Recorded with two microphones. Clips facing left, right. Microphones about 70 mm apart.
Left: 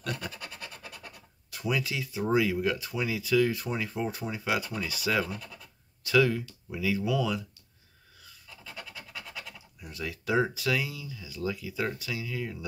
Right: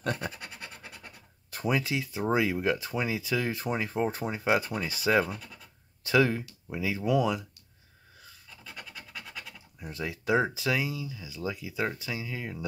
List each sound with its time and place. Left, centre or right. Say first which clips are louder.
0.0 s scratch: right 4 dB; right
1.5 s speech: right 2 dB; right
5.2 s speech: right 1 dB; centre
6.0 s speech: even; right
9.8 s speech: right 2 dB; right